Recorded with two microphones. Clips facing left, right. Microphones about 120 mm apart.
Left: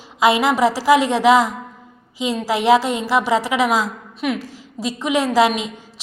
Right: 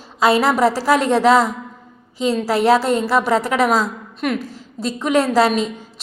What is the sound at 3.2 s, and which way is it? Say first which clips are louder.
Speech: right 1 dB; 45° right (ahead or behind).